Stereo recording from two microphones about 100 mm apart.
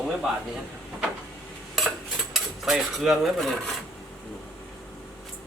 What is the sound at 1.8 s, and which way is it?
Stir, centre (ahead or behind).